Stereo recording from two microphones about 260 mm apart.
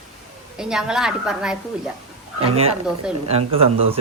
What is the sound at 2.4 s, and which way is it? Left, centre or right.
Speech, right.